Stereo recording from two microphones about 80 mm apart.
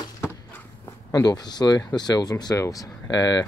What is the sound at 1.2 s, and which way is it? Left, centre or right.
Speech, left.